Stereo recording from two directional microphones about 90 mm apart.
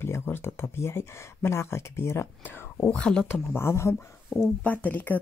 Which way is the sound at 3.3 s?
25° left (ahead or behind).